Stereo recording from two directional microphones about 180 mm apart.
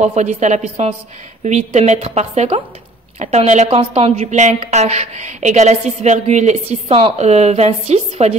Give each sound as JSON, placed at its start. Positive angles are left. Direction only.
{"t": 0.0, "sound": "a woman's voice", "side_deg": -40}